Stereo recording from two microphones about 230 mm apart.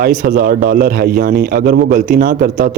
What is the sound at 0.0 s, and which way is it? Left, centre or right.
A man's voice, right.